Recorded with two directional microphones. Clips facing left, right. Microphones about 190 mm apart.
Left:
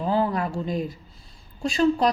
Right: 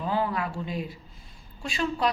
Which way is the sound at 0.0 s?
35° left (ahead or behind).